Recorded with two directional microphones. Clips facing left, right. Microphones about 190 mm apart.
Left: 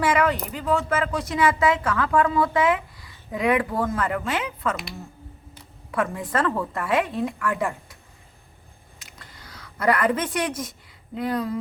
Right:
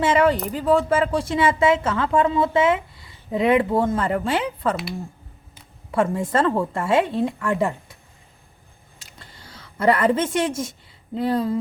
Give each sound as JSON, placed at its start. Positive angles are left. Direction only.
{"t": 0.0, "sound": "speech", "side_deg": -30}
{"t": 5.9, "sound": "speech", "side_deg": -30}
{"t": 9.0, "sound": "a sound", "side_deg": -30}